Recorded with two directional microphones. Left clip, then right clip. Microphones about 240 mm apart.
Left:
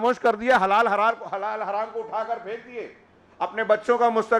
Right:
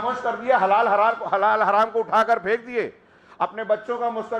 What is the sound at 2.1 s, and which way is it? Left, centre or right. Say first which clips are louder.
Speech: right 9 dB; right.